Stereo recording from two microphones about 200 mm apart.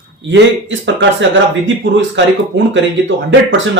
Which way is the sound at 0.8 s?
65° right (ahead or behind).